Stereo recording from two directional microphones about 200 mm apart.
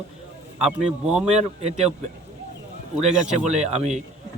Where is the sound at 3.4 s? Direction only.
35° right (ahead or behind).